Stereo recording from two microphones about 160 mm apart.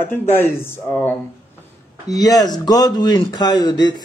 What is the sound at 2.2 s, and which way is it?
Speech, 25° left (ahead or behind).